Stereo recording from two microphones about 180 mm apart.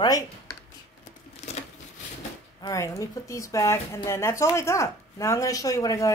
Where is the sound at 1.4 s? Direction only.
40° left (ahead or behind).